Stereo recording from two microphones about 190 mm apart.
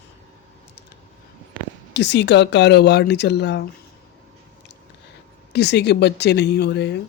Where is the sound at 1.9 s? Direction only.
65° left (ahead or behind).